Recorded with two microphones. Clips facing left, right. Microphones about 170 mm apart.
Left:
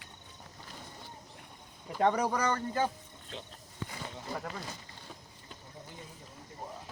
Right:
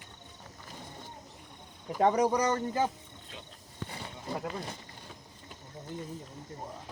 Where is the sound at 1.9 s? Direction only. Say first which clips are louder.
Right 3 dB; 15° right (ahead or behind).